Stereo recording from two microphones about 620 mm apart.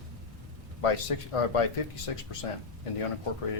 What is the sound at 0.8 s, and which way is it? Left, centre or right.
Speech, left.